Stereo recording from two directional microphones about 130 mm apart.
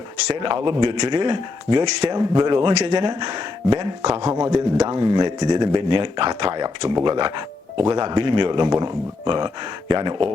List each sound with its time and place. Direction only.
0.3 s speech: 40° right (ahead or behind)
4.3 s speech: 20° right (ahead or behind)
4.5 s speech: 30° right (ahead or behind)